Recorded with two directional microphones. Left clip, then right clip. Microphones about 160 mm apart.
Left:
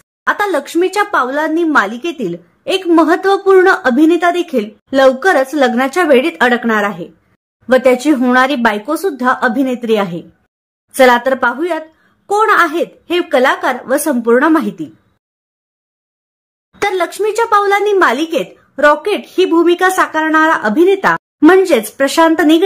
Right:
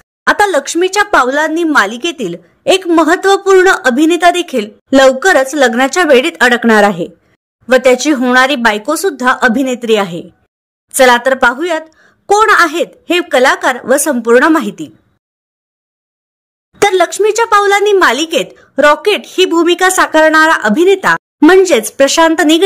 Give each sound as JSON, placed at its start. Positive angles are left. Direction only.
{"t": 0.2, "sound": "speech", "side_deg": -45}
{"t": 16.7, "sound": "speech", "side_deg": -45}